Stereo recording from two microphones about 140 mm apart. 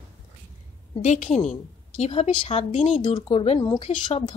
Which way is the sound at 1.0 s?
60° left (ahead or behind).